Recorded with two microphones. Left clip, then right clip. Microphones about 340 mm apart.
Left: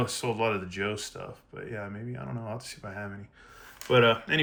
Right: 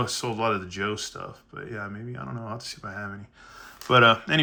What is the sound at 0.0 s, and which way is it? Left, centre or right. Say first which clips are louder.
Speech: right 2 dB; centre.